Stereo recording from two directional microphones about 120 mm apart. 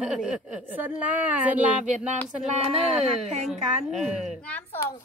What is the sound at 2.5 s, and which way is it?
Speech, 60° right (ahead or behind).